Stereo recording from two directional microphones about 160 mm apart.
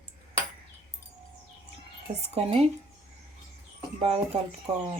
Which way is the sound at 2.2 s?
40° right (ahead or behind).